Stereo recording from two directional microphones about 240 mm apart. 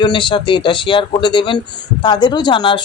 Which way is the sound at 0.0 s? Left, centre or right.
Centre.